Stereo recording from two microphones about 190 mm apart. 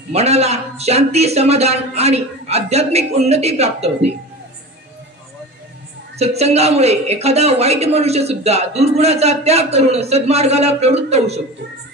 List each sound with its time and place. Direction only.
0.1 s speech: 35° right (ahead or behind)
6.1 s speech: 35° right (ahead or behind)